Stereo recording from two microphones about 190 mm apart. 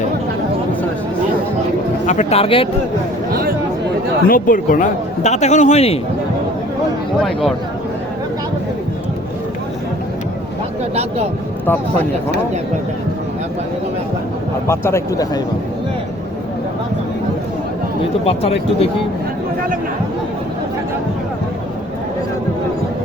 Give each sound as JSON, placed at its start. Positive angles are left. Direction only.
{"t": 2.0, "sound": "a man's voice", "side_deg": 35}
{"t": 4.3, "sound": "a man's voice", "side_deg": 45}
{"t": 7.2, "sound": "speech", "side_deg": 0}
{"t": 14.7, "sound": "speech", "side_deg": 15}
{"t": 18.3, "sound": "a man's voice", "side_deg": 30}